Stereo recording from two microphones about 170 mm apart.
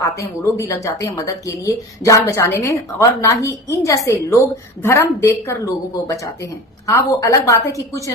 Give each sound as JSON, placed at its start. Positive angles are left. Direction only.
{"t": 0.0, "sound": "a woman's voice", "side_deg": 15}